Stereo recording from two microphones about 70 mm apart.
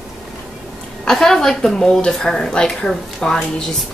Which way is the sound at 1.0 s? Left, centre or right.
Centre.